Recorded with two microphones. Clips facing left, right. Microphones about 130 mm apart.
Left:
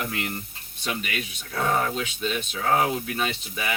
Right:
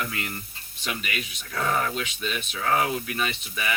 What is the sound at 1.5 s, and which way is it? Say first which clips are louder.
Speech: left 2 dB; 30° left (ahead or behind).